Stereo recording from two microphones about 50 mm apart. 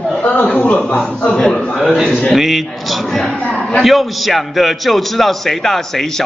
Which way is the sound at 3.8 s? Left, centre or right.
Centre.